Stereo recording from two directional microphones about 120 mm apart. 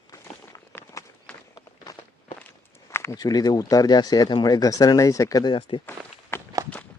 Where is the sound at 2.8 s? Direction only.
25° left (ahead or behind); by 5.8 s 45° left (ahead or behind).